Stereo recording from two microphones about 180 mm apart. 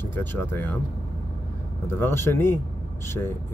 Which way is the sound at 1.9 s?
15° left (ahead or behind).